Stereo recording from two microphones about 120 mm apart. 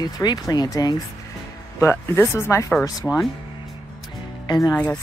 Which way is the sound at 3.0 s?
5° left (ahead or behind).